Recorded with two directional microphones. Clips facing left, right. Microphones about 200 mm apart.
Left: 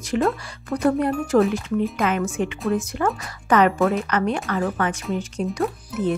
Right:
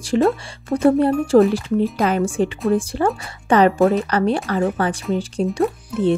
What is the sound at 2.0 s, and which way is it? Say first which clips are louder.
Speech: right 4 dB; 35° right (ahead or behind).